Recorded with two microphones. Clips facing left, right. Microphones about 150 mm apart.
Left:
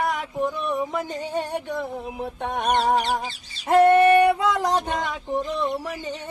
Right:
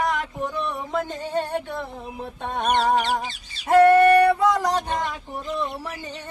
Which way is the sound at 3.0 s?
35° left (ahead or behind).